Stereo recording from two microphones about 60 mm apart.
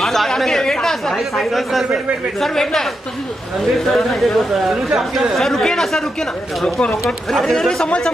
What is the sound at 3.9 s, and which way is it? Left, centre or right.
Speech, centre.